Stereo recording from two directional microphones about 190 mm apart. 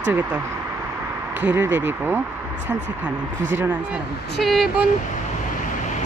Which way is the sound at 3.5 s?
10° right (ahead or behind).